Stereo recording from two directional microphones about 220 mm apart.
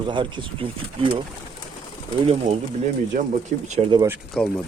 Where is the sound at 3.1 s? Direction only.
35° right (ahead or behind).